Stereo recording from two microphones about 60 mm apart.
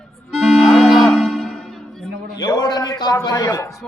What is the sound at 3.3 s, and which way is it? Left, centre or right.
Speech, left.